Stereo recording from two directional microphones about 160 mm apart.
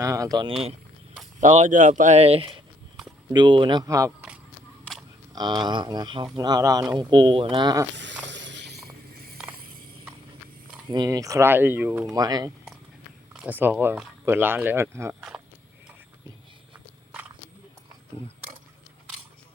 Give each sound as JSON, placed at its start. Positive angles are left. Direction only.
{"t": 0.0, "sound": "speech", "side_deg": -20}
{"t": 1.4, "sound": "speech", "side_deg": -50}
{"t": 5.3, "sound": "speech", "side_deg": -25}
{"t": 7.9, "sound": "a sound", "side_deg": -90}
{"t": 9.1, "sound": "ratchet", "side_deg": -75}
{"t": 10.9, "sound": "speech", "side_deg": -20}
{"t": 12.1, "sound": "speech", "side_deg": -25}
{"t": 13.4, "sound": "speech", "side_deg": -10}
{"t": 16.7, "sound": "walk", "side_deg": -10}